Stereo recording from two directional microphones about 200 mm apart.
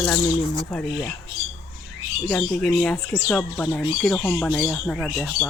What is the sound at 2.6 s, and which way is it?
Speech, 5° left (ahead or behind).